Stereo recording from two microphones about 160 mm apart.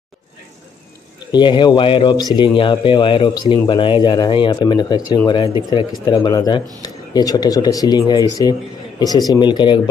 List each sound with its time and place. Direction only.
1.3 s speech: 30° left (ahead or behind)